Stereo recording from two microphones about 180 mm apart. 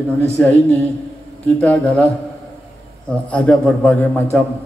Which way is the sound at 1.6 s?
10° left (ahead or behind).